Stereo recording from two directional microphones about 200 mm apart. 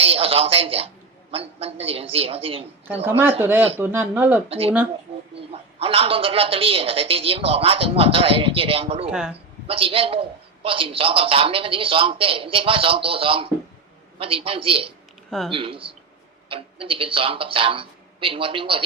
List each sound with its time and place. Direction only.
0.0 s a woman's voice: 30° right (ahead or behind)
3.4 s speech: 10° right (ahead or behind)
4.4 s a man's voice: 30° right (ahead or behind)
9.0 s speech: 5° right (ahead or behind)
9.6 s a man's voice: 30° right (ahead or behind)
15.3 s speech: centre (ahead or behind)
15.5 s a man's voice: 25° right (ahead or behind)